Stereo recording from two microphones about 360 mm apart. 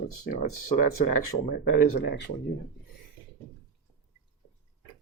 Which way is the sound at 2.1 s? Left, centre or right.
Left.